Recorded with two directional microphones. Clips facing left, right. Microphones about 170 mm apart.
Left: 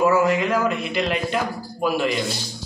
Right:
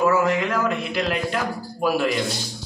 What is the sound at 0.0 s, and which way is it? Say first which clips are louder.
A man's voice: left 1 dB; 5° left (ahead or behind).